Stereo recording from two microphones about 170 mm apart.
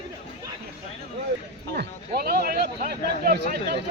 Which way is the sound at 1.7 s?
65° right (ahead or behind).